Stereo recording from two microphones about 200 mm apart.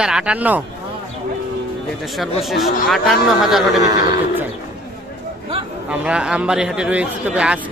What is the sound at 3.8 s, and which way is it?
Speech, 15° right (ahead or behind).